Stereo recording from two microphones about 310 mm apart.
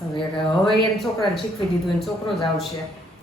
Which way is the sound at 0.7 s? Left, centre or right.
Centre.